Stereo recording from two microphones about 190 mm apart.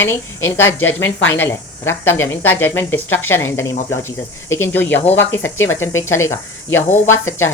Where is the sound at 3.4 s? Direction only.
90° left.